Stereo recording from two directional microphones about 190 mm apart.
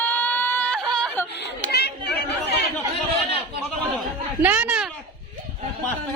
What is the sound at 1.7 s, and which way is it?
Chatter, 60° left (ahead or behind).